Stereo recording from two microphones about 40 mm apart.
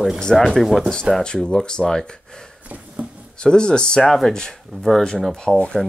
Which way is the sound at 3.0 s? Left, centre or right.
Right.